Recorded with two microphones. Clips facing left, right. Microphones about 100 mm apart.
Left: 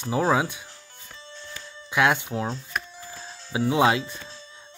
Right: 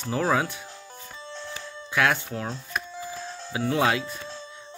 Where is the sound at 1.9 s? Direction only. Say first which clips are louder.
Left 2 dB; 20° left (ahead or behind).